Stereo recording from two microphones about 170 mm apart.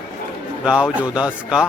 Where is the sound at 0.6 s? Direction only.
5° right (ahead or behind).